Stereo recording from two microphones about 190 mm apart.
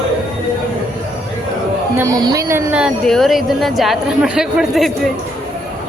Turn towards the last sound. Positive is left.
turn(degrees=0)  # may be behind; listen again after turning